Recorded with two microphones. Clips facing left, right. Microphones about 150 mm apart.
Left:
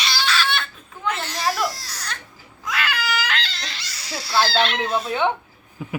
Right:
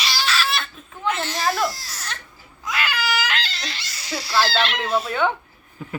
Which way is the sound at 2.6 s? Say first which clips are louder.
Even; centre (ahead or behind).